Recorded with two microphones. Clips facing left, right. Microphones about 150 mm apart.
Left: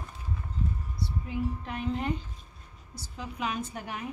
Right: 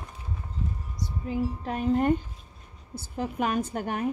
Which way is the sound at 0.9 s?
40° right (ahead or behind).